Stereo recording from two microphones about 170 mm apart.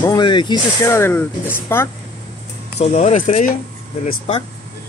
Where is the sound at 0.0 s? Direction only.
25° left (ahead or behind).